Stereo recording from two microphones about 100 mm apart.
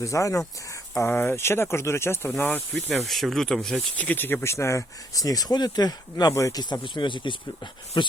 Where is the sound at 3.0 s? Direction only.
Centre (ahead or behind).